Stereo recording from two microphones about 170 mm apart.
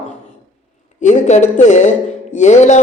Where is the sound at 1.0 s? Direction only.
45° left (ahead or behind).